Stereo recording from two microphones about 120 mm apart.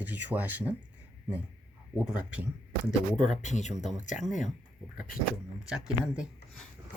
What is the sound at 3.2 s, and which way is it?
Speech, 85° left.